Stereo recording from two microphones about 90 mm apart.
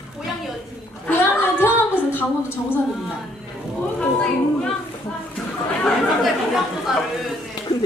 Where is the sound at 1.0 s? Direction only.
25° left (ahead or behind).